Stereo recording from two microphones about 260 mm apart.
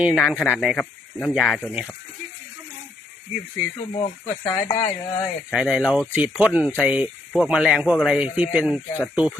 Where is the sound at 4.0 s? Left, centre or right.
Centre.